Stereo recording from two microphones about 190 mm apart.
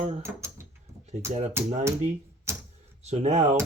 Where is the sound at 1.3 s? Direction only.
35° right (ahead or behind).